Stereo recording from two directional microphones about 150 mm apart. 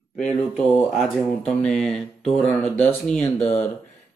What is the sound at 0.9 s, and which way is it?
Speech, centre (ahead or behind).